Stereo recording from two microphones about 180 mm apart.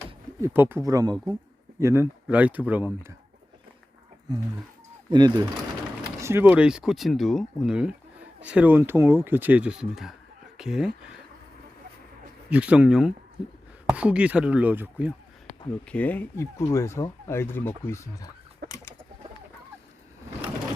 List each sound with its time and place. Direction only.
0.4 s speech: 10° right (ahead or behind)
5.1 s speech: 25° right (ahead or behind); by 10.9 s 5° right (ahead or behind)
12.5 s speech: 5° right (ahead or behind)
15.9 s speech: 10° left (ahead or behind)
18.6 s bird: 65° right (ahead or behind)